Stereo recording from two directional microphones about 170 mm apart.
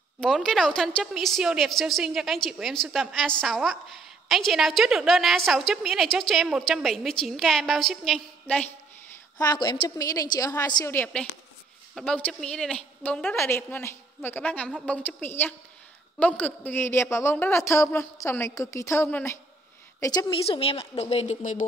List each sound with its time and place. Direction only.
0.2 s a woman's voice: 5° left (ahead or behind)
9.4 s a woman's voice: 25° left (ahead or behind)
20.0 s a woman's voice: 25° left (ahead or behind)
20.4 s a woman's voice: 35° left (ahead or behind)